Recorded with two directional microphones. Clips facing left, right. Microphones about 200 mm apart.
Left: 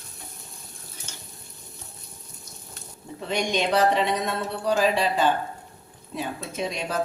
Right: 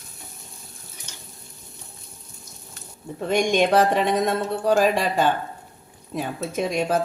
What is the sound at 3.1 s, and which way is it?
Speech, 50° right (ahead or behind).